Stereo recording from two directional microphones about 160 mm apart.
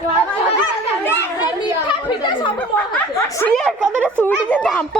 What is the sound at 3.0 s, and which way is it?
A woman's voice, 10° left (ahead or behind).